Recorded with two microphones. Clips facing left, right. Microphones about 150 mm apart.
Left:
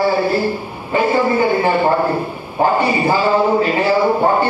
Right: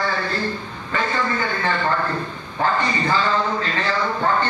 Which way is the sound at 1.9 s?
35° left (ahead or behind).